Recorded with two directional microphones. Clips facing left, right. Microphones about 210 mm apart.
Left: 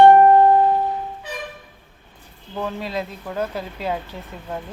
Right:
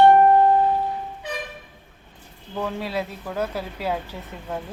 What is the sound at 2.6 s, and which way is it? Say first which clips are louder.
Speech: even; 10° right (ahead or behind).